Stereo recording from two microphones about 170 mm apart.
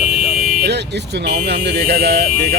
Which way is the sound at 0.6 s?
80° right.